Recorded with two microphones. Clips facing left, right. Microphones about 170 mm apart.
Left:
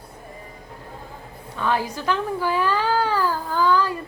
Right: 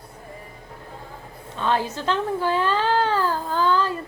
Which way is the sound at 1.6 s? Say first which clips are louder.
Even; 20° right (ahead or behind).